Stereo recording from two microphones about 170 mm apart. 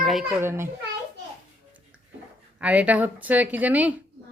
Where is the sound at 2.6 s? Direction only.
10° right (ahead or behind).